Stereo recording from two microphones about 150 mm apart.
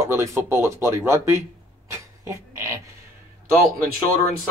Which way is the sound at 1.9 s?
20° right (ahead or behind).